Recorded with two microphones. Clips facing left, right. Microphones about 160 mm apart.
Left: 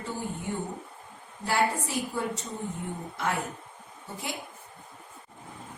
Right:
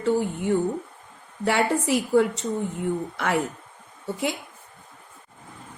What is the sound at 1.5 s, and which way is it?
Speech, 75° right (ahead or behind).